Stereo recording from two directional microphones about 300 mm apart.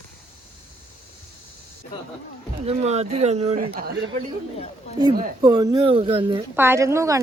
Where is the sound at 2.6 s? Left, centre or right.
Right.